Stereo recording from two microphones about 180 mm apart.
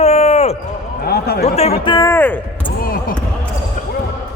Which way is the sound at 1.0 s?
60° left (ahead or behind).